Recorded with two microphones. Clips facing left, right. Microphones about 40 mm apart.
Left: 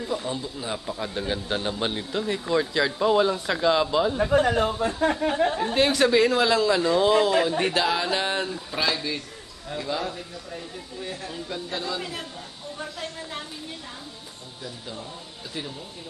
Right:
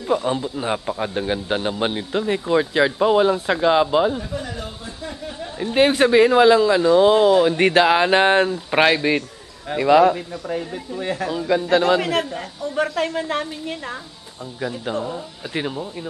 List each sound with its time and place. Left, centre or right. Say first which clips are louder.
0.0 s a man's voice: right 8 dB; right; by 4.2 s centre
4.2 s speech: left 9 dB; left
5.7 s a man's voice: right 8 dB; right
7.4 s speech: right 8 dB; right
9.8 s a man's voice: right 16 dB; right
14.6 s speech: right 13 dB; right